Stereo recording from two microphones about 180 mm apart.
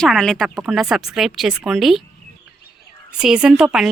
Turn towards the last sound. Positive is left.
turn(degrees=-5)  # may be behind; listen again after turning